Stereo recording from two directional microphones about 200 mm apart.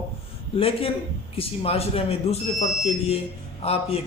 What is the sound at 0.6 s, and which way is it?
Speech, 30° left (ahead or behind).